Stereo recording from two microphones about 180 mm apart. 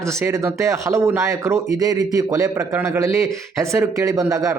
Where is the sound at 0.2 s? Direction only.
15° right (ahead or behind).